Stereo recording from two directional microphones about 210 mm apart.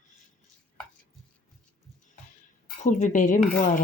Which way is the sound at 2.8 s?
35° left (ahead or behind).